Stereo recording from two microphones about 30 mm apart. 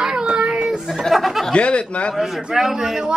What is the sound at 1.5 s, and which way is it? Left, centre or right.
Speech, left.